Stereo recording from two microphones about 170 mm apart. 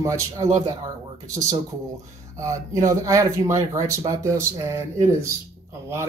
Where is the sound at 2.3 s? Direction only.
20° right (ahead or behind).